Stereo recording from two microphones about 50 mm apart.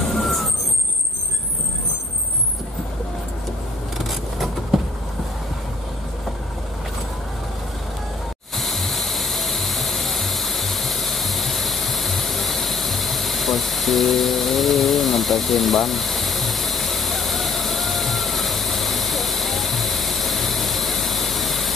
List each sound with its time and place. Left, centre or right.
0.1 s vehicle: centre
4.0 s vehicle: centre
8.5 s music: centre